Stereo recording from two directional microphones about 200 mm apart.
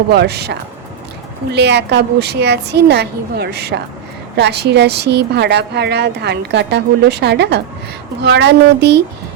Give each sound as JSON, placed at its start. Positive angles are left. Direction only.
{"t": 0.1, "sound": "speech", "side_deg": -55}